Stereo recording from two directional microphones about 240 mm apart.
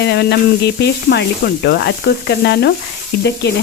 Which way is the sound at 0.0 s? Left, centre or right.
Left.